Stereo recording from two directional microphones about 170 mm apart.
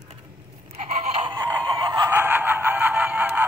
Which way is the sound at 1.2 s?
25° right (ahead or behind).